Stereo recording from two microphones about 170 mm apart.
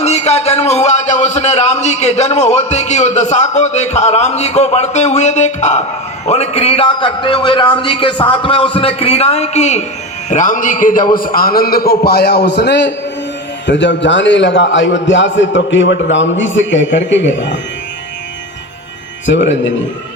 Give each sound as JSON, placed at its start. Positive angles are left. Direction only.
{"t": 0.0, "sound": "a man's voice", "side_deg": 40}
{"t": 19.2, "sound": "a man's voice", "side_deg": 90}